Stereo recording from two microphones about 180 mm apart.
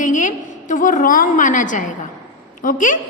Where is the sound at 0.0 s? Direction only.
45° left (ahead or behind).